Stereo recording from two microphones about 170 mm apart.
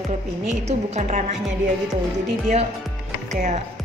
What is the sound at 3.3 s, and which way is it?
Speech, 45° right (ahead or behind).